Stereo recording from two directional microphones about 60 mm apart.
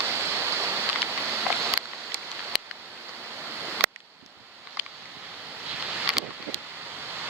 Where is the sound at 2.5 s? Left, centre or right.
Centre.